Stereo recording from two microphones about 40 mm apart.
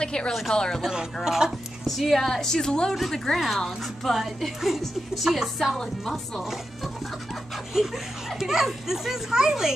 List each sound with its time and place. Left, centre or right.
0.0 s a woman's voice: left
1.2 s a child's voice: centre
1.9 s a woman's voice: centre
5.8 s a woman's voice: centre
6.4 s speech: centre
7.5 s a sound: centre
8.4 s a child's voice: centre